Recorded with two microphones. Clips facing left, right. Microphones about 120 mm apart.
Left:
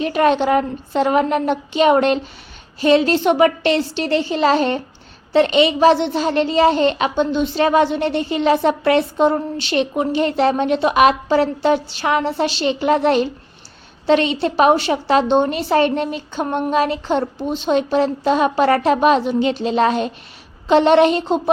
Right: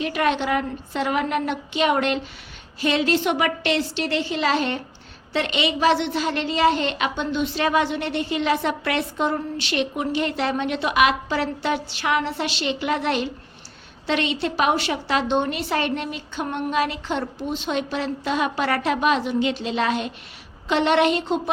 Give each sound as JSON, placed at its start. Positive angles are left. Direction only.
{"t": 0.0, "sound": "a woman's voice", "side_deg": 35}